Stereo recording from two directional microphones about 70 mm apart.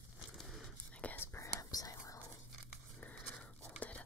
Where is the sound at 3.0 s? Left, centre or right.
Centre.